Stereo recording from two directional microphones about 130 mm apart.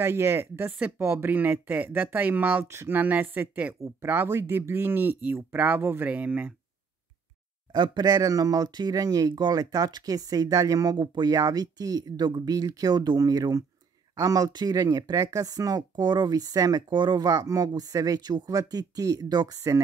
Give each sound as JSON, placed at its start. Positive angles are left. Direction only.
{"t": 0.0, "sound": "speech", "side_deg": -20}
{"t": 7.7, "sound": "speech", "side_deg": -35}